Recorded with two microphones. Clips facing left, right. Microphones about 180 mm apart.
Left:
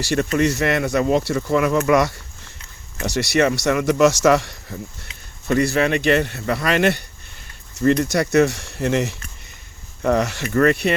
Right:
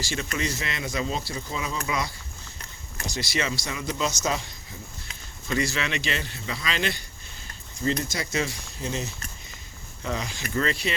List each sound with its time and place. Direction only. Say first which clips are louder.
0.0 s speech: left 11 dB; 60° left (ahead or behind)
10.0 s speech: left 12 dB; 65° left (ahead or behind)